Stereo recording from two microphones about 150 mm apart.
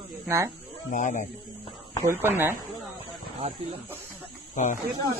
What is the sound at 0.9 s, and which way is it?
Speech, 55° left (ahead or behind).